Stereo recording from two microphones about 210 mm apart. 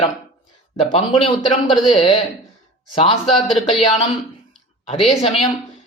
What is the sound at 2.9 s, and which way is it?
Speech, 30° left (ahead or behind).